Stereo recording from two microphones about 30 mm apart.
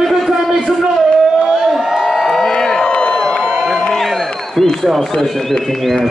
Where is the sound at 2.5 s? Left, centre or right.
Left.